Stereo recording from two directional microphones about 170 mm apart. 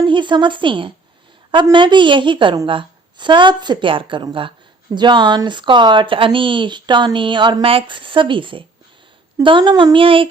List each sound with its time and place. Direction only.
0.0 s a woman's voice: 30° right (ahead or behind)